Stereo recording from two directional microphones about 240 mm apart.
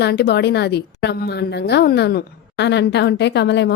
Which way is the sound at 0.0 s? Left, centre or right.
Left.